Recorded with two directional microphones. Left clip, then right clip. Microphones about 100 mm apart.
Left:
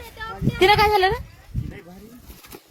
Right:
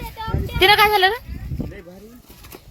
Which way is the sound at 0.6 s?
45° left (ahead or behind).